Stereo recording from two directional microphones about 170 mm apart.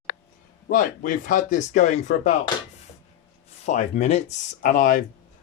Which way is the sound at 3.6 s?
40° left (ahead or behind).